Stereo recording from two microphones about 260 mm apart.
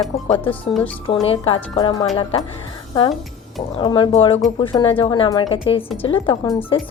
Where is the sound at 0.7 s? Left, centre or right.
Centre.